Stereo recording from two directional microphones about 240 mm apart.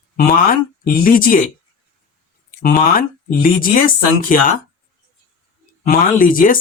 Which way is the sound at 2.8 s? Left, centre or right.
Left.